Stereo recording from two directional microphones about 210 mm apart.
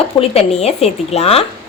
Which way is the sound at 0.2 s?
30° left (ahead or behind).